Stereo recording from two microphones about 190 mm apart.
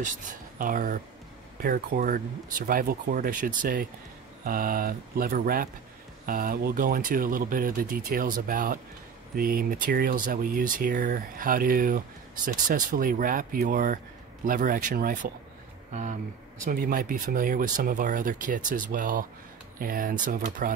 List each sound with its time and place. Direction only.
0.6 s speech: 45° right (ahead or behind)
15.9 s speech: 35° right (ahead or behind)
16.6 s speech: 50° right (ahead or behind)